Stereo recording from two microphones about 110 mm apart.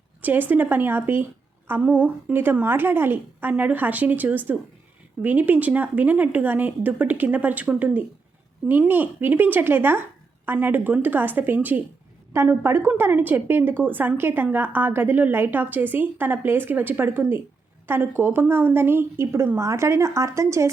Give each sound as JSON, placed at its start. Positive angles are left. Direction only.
{"t": 0.2, "sound": "a woman's voice", "side_deg": -15}